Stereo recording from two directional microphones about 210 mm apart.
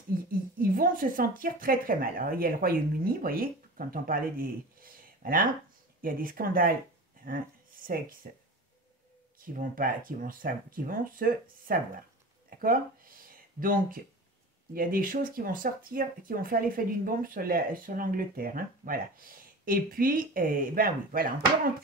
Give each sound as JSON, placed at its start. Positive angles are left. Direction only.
{"t": 0.3, "sound": "speech", "side_deg": -40}
{"t": 9.6, "sound": "speech", "side_deg": -40}